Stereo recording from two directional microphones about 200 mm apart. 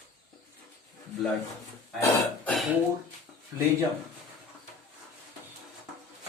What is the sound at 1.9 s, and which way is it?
Burping, 15° left (ahead or behind).